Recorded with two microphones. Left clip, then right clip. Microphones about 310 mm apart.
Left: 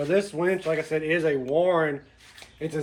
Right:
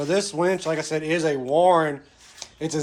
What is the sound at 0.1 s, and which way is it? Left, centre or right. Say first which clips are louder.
Speech: right 3 dB; centre.